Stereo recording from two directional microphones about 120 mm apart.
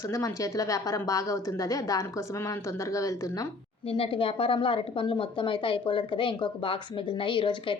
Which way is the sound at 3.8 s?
50° left (ahead or behind).